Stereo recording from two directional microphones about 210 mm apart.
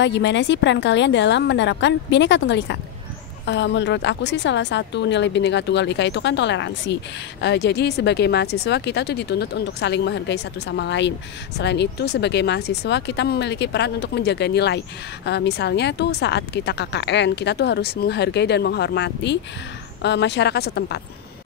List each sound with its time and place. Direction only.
0.0 s a woman's voice: 60° left (ahead or behind)